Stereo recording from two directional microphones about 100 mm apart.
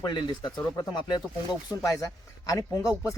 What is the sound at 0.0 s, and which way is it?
Speech, 45° left (ahead or behind).